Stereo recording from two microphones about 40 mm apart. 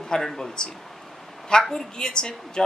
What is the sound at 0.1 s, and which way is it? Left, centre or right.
Speech, centre.